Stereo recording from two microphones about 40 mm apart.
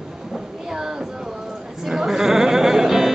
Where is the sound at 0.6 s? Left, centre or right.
Centre.